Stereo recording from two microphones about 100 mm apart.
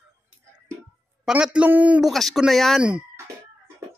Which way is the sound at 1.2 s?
10° right (ahead or behind).